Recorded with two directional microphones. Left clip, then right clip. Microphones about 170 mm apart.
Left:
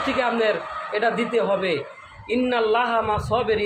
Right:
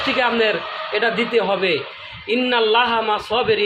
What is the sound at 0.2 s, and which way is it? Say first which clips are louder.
A man's voice: right 3 dB; 30° right (ahead or behind).